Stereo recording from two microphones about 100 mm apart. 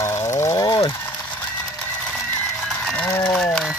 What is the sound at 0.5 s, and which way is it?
Ratchet, 45° left (ahead or behind).